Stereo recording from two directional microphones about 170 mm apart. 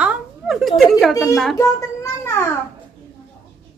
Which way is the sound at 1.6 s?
15° left (ahead or behind).